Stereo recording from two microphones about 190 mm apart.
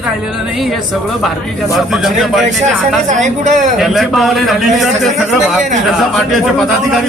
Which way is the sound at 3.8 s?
Centre (ahead or behind).